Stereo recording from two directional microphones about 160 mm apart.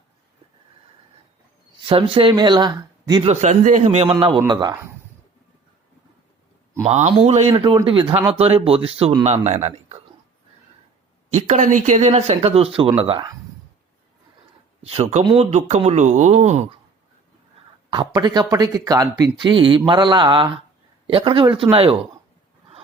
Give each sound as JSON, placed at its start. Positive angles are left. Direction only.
{"t": 1.8, "sound": "speech", "side_deg": -35}
{"t": 3.2, "sound": "a man's voice", "side_deg": -45}
{"t": 6.8, "sound": "a man's voice", "side_deg": -45}
{"t": 11.3, "sound": "a man's voice", "side_deg": -45}
{"t": 14.8, "sound": "speech", "side_deg": -40}
{"t": 17.9, "sound": "a man's voice", "side_deg": -30}